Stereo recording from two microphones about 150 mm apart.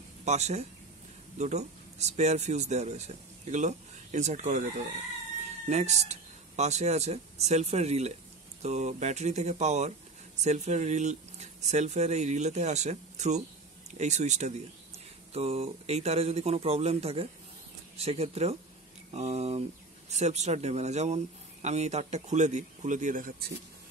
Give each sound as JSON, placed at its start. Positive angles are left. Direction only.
{"t": 0.2, "sound": "speech", "side_deg": -50}
{"t": 5.7, "sound": "speech", "side_deg": -50}